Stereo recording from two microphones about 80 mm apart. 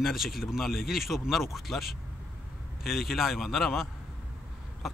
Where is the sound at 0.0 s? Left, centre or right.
Centre.